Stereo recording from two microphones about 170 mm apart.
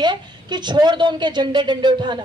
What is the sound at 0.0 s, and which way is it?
A woman's voice, 25° right (ahead or behind).